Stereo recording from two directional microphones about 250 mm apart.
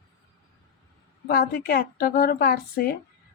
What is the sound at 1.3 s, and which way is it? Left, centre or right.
Speech, left.